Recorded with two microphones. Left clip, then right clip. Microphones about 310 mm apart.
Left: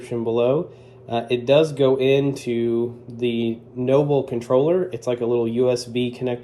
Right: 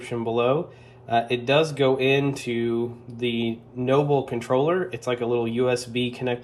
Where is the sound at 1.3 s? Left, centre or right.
Centre.